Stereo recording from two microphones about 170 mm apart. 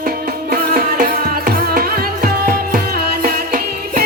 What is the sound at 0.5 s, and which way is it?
Music, 60° right (ahead or behind).